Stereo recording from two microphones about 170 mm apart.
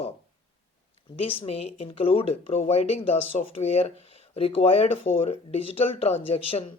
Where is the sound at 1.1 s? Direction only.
35° left (ahead or behind).